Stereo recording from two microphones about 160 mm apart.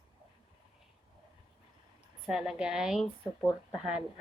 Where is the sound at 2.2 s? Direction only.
Centre (ahead or behind).